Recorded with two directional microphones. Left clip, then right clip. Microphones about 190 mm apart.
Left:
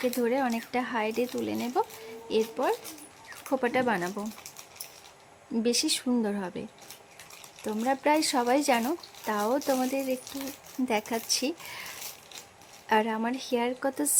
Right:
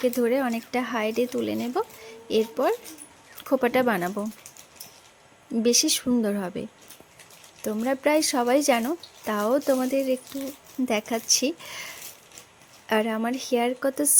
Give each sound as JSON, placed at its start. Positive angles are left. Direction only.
{"t": 0.0, "sound": "speech", "side_deg": -10}
{"t": 5.6, "sound": "speech", "side_deg": -10}
{"t": 12.9, "sound": "speech", "side_deg": -10}